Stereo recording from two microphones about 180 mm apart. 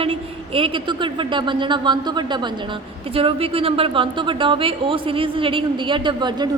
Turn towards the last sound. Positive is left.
turn(degrees=-25)  # may be behind; listen again after turning